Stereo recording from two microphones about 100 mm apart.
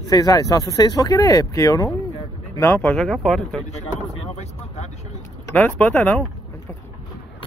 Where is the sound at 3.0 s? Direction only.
Centre (ahead or behind).